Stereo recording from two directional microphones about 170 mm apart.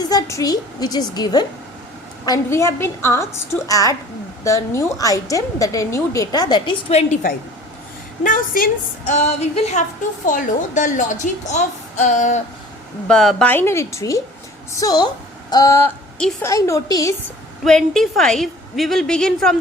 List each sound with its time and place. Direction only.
0.1 s a woman's voice: 20° left (ahead or behind)
6.9 s a woman's voice: 50° left (ahead or behind)
9.1 s a sound: 40° left (ahead or behind)
10.2 s a woman's voice: 50° left (ahead or behind)
13.1 s a woman's voice: 5° left (ahead or behind); by 15.0 s 20° left (ahead or behind)
15.4 s a sound: 20° left (ahead or behind)
16.1 s a woman's voice: 5° left (ahead or behind)
16.5 s a woman's voice: 20° left (ahead or behind)
17.6 s a woman's voice: centre (ahead or behind)